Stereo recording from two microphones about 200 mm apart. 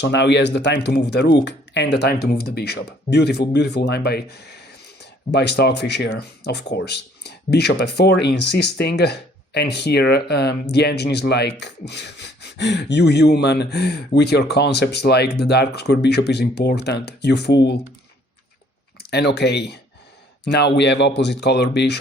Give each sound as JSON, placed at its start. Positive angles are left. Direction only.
{"t": 0.0, "sound": "speech", "side_deg": 60}
{"t": 19.1, "sound": "speech", "side_deg": 55}